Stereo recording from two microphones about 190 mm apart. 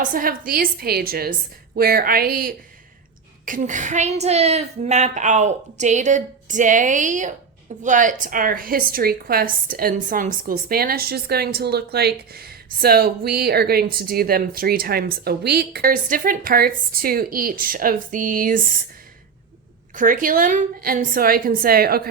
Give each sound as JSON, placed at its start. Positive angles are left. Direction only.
{"t": 0.0, "sound": "a woman's voice", "side_deg": -45}
{"t": 20.0, "sound": "a woman's voice", "side_deg": -45}